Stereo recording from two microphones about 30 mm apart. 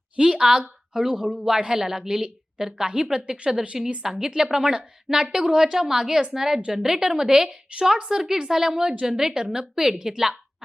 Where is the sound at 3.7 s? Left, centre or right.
Centre.